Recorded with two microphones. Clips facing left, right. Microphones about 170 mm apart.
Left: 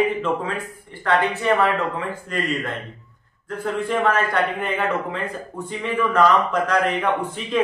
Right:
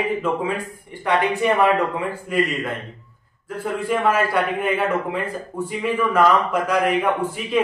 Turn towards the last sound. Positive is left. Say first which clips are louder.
# right 2 dB
turn(degrees=-10)  # may be behind; listen again after turning